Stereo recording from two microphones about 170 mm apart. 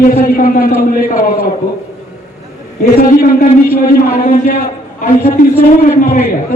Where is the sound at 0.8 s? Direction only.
60° left (ahead or behind).